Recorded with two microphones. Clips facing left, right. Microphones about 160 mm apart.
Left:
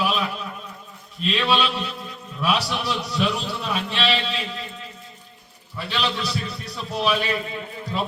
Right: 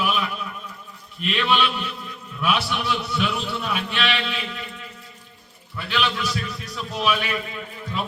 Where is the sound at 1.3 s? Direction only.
35° left (ahead or behind).